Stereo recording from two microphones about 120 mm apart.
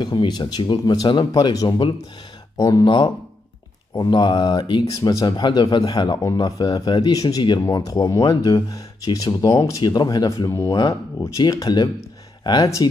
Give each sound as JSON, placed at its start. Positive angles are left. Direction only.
{"t": 0.0, "sound": "speech", "side_deg": 40}
{"t": 4.8, "sound": "speech", "side_deg": 30}